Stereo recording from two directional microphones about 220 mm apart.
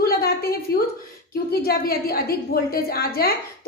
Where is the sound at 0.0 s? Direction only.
45° left (ahead or behind).